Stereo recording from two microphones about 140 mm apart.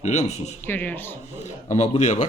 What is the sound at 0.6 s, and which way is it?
Speech, 15° left (ahead or behind).